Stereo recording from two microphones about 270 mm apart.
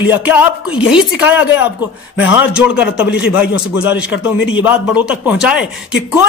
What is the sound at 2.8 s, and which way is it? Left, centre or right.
Speech, left.